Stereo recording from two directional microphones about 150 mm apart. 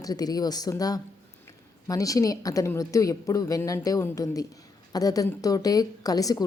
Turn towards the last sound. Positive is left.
turn(degrees=25)  # may be behind; listen again after turning